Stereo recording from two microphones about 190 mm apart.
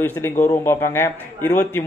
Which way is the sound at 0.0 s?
10° left (ahead or behind).